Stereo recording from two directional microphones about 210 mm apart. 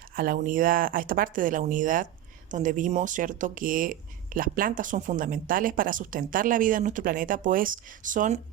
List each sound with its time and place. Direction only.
0.2 s speech: 40° right (ahead or behind)